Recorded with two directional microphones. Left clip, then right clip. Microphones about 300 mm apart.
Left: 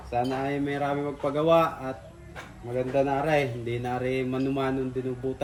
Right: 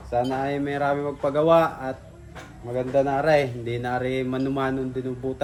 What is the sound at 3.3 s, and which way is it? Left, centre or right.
Speech, right.